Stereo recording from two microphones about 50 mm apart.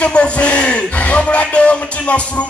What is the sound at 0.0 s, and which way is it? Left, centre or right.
Speech, left.